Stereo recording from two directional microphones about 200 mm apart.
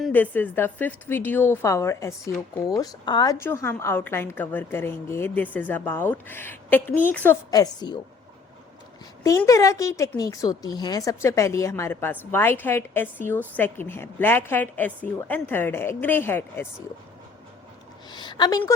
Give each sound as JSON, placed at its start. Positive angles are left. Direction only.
{"t": 0.0, "sound": "a woman's voice", "side_deg": 10}
{"t": 7.5, "sound": "a woman's voice", "side_deg": 20}
{"t": 9.4, "sound": "a woman's voice", "side_deg": 15}
{"t": 18.1, "sound": "a sound", "side_deg": 20}